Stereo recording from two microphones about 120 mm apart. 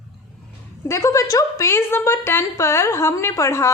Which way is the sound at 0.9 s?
25° left (ahead or behind).